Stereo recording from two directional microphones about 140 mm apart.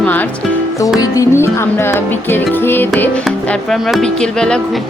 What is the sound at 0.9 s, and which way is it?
Music, 25° left (ahead or behind).